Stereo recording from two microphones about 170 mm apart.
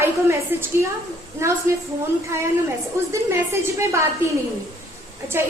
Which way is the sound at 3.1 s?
15° right (ahead or behind).